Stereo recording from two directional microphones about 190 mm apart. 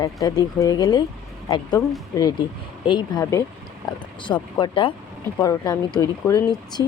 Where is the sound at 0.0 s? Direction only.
20° left (ahead or behind).